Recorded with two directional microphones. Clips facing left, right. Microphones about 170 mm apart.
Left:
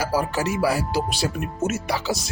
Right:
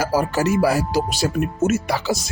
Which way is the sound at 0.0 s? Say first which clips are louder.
Right 4 dB; 45° right (ahead or behind).